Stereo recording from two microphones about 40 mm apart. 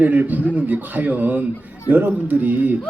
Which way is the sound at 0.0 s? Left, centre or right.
Right.